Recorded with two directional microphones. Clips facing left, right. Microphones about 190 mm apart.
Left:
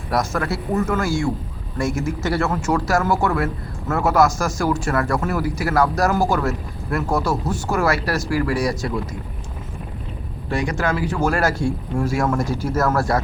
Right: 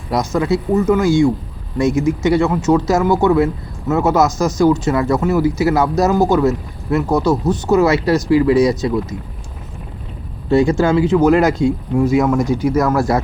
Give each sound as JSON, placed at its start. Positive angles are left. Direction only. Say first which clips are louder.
{"t": 0.3, "sound": "speech", "louder": "right 6 dB", "side_deg": -20}
{"t": 10.5, "sound": "speech", "louder": "right 9 dB", "side_deg": -25}